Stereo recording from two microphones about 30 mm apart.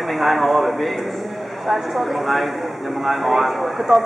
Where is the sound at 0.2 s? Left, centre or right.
Centre.